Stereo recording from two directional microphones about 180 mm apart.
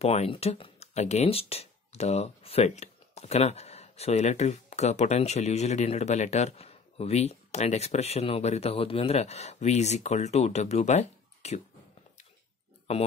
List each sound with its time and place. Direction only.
0.0 s speech: 35° left (ahead or behind)